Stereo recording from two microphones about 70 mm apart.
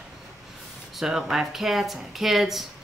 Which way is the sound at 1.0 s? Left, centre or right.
Centre.